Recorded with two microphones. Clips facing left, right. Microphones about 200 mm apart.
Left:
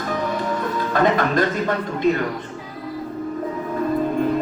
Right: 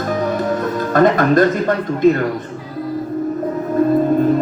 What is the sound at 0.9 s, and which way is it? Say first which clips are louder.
Speech: right 6 dB; 45° right (ahead or behind).